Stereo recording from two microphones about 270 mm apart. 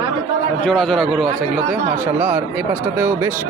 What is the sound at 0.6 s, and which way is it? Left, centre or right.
Speech, centre.